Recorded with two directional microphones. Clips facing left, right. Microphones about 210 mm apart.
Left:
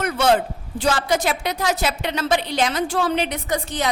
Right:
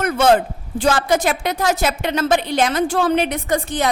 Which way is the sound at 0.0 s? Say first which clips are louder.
Right 3 dB; 50° right (ahead or behind).